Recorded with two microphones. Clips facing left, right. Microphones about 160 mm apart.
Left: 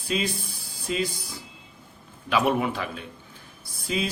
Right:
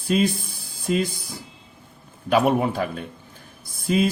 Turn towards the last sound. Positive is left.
turn(degrees=-50)  # may be behind; listen again after turning